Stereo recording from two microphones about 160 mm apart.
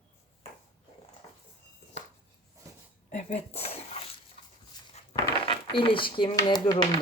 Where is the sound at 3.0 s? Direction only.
45° left (ahead or behind).